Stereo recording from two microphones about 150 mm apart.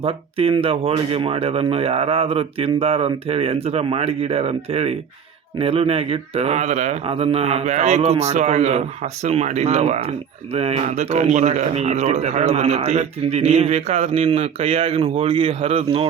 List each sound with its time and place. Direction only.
0.0 s speech: 40° right (ahead or behind)